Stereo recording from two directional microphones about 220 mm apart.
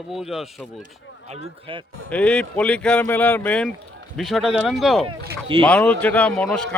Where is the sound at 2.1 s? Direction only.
5° left (ahead or behind).